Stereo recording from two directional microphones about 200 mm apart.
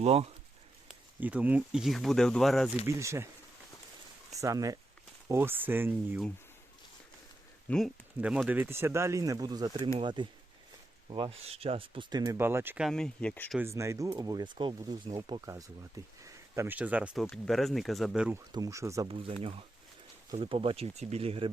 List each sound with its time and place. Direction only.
0.0 s speech: 30° right (ahead or behind)
0.9 s speech: 5° right (ahead or behind)
2.8 s speech: 15° right (ahead or behind)
4.4 s speech: 15° right (ahead or behind)
7.7 s speech: centre (ahead or behind)
13.6 s speech: 15° right (ahead or behind)
18.5 s speech: 15° right (ahead or behind)
19.0 s speech: 25° right (ahead or behind)